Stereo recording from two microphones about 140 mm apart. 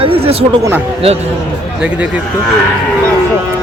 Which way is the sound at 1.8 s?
10° right (ahead or behind).